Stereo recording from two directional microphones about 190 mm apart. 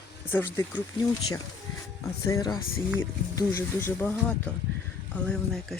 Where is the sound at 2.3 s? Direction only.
20° left (ahead or behind).